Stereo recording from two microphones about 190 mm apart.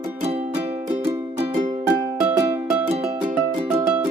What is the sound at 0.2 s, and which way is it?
Music, 35° right (ahead or behind).